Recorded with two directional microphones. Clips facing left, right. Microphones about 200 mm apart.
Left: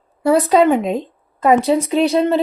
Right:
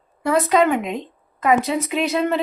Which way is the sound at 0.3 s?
30° left (ahead or behind).